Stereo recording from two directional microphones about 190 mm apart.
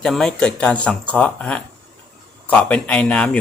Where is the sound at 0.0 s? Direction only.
Centre (ahead or behind).